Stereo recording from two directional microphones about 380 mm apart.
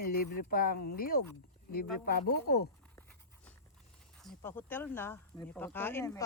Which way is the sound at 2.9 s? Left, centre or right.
Centre.